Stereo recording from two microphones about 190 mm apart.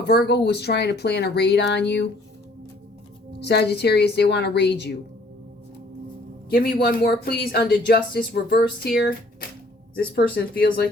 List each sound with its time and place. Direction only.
0.0 s speech: 60° left (ahead or behind)
3.4 s speech: 60° left (ahead or behind)
6.5 s speech: 55° left (ahead or behind)
10.3 s speech: 50° left (ahead or behind)